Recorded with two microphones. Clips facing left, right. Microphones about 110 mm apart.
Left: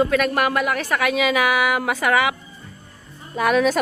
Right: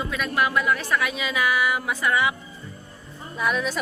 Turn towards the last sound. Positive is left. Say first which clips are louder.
# left 7 dB
turn(degrees=70)  # may be behind; listen again after turning